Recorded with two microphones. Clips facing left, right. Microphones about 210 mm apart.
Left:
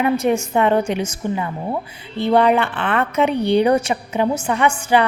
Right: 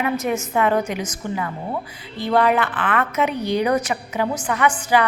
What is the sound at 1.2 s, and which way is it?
A woman's voice, 20° left (ahead or behind).